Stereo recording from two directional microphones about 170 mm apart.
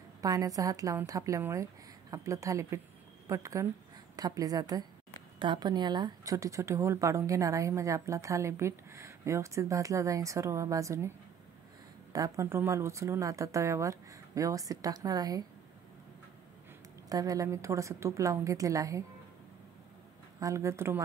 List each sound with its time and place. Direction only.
0.2 s a woman's voice: 20° right (ahead or behind)
12.1 s a woman's voice: 20° right (ahead or behind)
17.1 s a woman's voice: 20° right (ahead or behind)
20.3 s speech: 20° right (ahead or behind)